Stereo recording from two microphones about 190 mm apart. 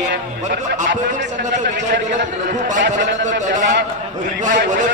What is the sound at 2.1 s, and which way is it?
Speech, 40° right (ahead or behind).